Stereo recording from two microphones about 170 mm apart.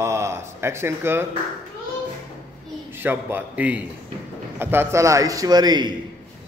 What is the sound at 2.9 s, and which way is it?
A man's voice, 10° right (ahead or behind).